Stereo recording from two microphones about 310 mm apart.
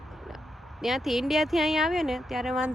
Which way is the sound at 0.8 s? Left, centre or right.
Centre.